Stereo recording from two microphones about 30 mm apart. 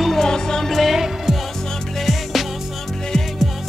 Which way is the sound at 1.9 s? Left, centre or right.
Centre.